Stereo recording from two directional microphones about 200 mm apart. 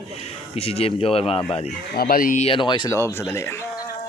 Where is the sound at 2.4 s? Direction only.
25° left (ahead or behind).